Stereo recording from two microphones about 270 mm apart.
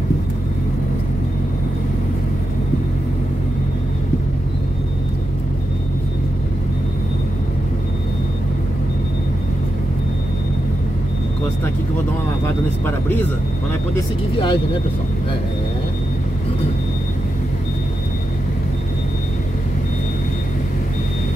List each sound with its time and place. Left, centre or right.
13.9 s speech: centre